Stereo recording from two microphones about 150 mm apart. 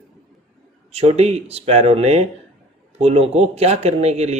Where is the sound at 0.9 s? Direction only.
45° right (ahead or behind).